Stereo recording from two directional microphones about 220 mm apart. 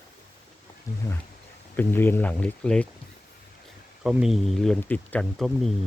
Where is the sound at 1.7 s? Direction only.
10° left (ahead or behind).